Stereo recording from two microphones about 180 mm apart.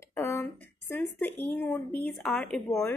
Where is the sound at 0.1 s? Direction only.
10° left (ahead or behind).